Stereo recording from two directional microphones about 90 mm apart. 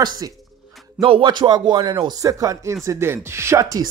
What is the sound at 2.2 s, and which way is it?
Speech, 40° right (ahead or behind).